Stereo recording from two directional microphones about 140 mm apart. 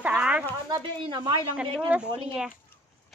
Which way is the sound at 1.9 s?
10° right (ahead or behind).